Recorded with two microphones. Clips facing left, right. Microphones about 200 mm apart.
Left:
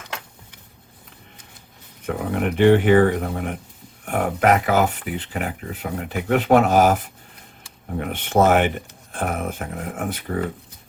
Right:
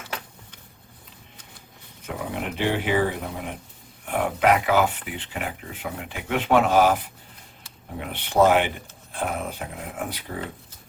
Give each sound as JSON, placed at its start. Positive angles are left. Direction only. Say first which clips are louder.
{"t": 2.0, "sound": "speech", "louder": "left 7 dB", "side_deg": 55}